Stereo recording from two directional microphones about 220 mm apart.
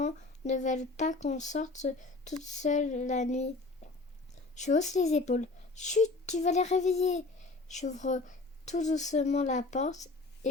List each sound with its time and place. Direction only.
0.0 s speech: 30° left (ahead or behind)
4.5 s speech: 30° left (ahead or behind)